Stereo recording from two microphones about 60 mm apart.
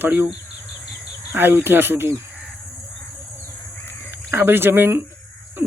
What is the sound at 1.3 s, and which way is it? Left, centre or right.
Speech, right.